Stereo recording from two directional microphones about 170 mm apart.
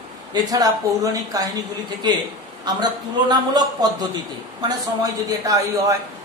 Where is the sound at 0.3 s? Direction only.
20° right (ahead or behind).